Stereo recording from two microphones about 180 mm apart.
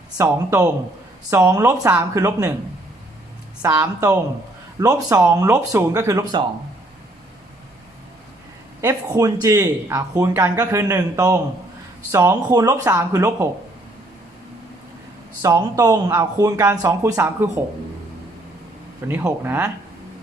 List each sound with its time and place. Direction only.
0.2 s speech: 15° right (ahead or behind)
3.6 s speech: 20° right (ahead or behind)
8.8 s speech: 15° right (ahead or behind)
15.4 s speech: 20° right (ahead or behind)
19.0 s speech: 10° right (ahead or behind)